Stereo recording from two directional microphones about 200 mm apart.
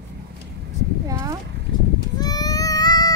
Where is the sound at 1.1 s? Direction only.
15° right (ahead or behind).